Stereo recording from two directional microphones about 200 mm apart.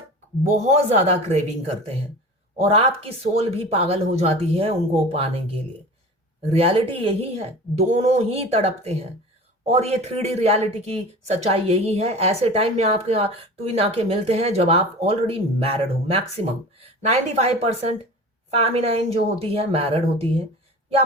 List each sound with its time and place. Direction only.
0.7 s speech: 35° right (ahead or behind)